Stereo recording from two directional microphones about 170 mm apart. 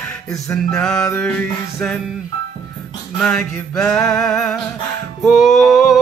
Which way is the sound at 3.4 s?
15° left (ahead or behind).